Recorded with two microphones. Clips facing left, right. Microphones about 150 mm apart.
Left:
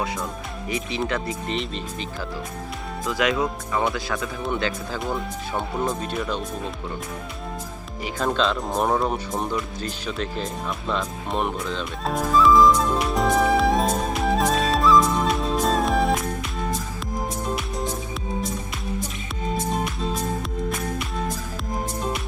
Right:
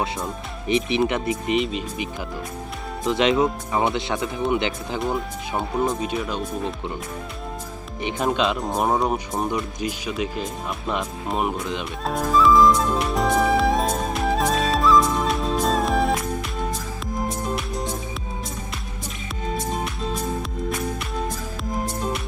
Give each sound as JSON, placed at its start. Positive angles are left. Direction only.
{"t": 0.7, "sound": "speech", "side_deg": -20}
{"t": 1.5, "sound": "speech", "side_deg": -5}
{"t": 3.0, "sound": "speech", "side_deg": -25}
{"t": 4.9, "sound": "speech", "side_deg": 0}
{"t": 8.0, "sound": "speech", "side_deg": -15}
{"t": 11.6, "sound": "speech", "side_deg": -15}
{"t": 12.0, "sound": "music", "side_deg": 0}
{"t": 17.2, "sound": "music", "side_deg": 0}